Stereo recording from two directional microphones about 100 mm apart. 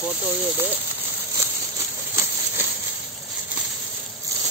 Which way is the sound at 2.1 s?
25° right (ahead or behind).